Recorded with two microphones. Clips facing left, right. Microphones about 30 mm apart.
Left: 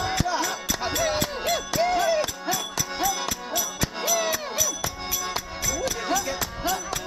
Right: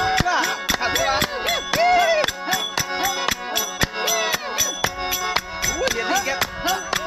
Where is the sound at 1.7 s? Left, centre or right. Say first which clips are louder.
Right 7 dB; right.